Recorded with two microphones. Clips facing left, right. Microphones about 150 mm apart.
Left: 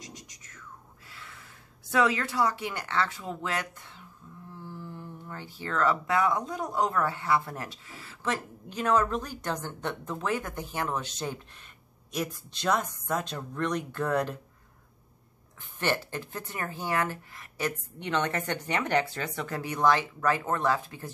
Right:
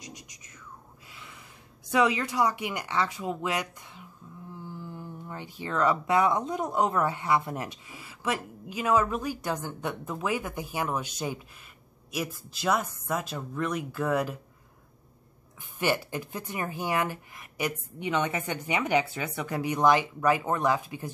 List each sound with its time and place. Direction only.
0.0 s a sound: 15° right (ahead or behind)
1.9 s speech: 15° right (ahead or behind)
15.8 s speech: 10° right (ahead or behind)